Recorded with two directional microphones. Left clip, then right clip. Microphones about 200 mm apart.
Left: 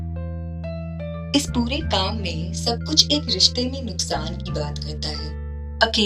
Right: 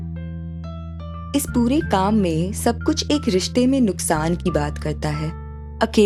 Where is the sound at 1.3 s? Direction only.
50° right (ahead or behind).